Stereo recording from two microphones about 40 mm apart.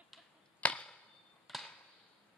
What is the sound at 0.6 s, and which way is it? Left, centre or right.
Arrow, left.